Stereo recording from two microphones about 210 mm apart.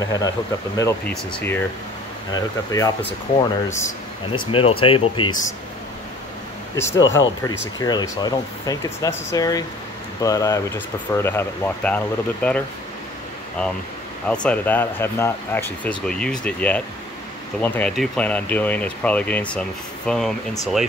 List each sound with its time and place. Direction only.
0.0 s speech: 15° left (ahead or behind)
2.7 s speech: 10° left (ahead or behind)
3.3 s speech: 20° left (ahead or behind)
6.7 s speech: 15° left (ahead or behind)
14.2 s speech: 5° left (ahead or behind)